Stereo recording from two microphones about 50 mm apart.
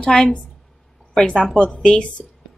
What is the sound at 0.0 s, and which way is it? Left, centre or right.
Speech, centre.